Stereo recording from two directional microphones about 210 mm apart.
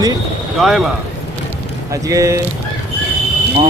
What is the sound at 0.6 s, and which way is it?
Speech, centre (ahead or behind).